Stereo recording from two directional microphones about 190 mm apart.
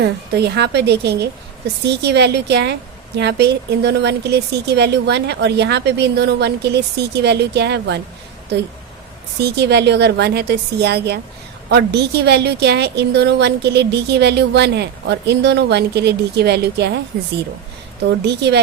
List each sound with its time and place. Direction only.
0.0 s a woman's voice: 60° right (ahead or behind)